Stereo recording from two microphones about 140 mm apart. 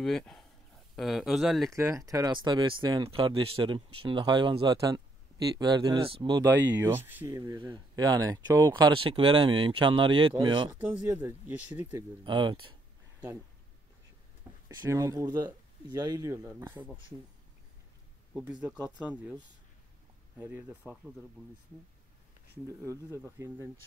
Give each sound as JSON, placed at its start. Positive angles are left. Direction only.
{"t": 0.0, "sound": "speech", "side_deg": 5}
{"t": 1.7, "sound": "speech", "side_deg": -20}
{"t": 6.7, "sound": "speech", "side_deg": -15}
{"t": 10.7, "sound": "speech", "side_deg": -10}
{"t": 12.3, "sound": "speech", "side_deg": -35}
{"t": 14.9, "sound": "speech", "side_deg": -25}
{"t": 18.3, "sound": "speech", "side_deg": -10}
{"t": 22.7, "sound": "speech", "side_deg": -20}